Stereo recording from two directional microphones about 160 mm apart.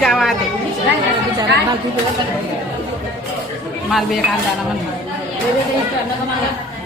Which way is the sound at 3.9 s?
Centre (ahead or behind).